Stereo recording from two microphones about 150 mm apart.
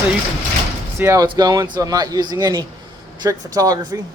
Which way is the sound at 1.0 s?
20° right (ahead or behind).